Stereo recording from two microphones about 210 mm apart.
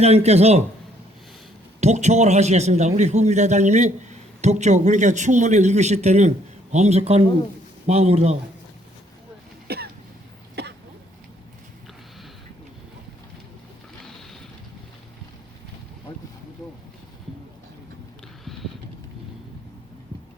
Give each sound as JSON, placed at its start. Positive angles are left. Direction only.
{"t": 0.0, "sound": "a man's voice", "side_deg": -30}
{"t": 1.8, "sound": "a man's voice", "side_deg": -30}
{"t": 9.7, "sound": "cough", "side_deg": -50}
{"t": 10.5, "sound": "throat clearing", "side_deg": -55}
{"t": 16.1, "sound": "boat", "side_deg": 20}
{"t": 18.4, "sound": "a sound", "side_deg": 0}